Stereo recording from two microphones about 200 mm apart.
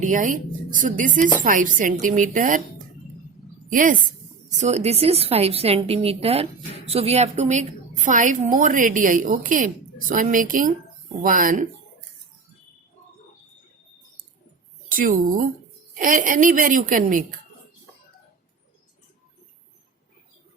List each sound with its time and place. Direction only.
0.0 s a woman's voice: 40° right (ahead or behind)
14.8 s a woman's voice: 45° right (ahead or behind)